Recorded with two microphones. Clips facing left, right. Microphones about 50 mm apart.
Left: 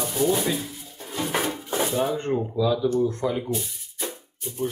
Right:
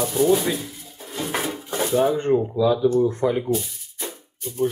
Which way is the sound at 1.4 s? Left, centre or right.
Centre.